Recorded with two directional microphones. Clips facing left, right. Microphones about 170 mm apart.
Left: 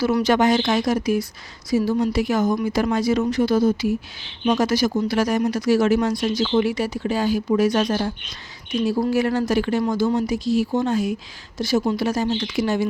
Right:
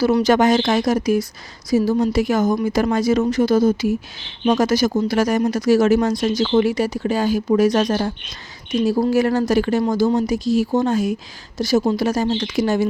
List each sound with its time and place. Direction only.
0.2 s speech: 40° right (ahead or behind)